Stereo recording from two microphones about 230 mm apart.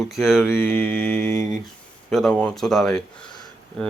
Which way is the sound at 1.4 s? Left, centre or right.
Right.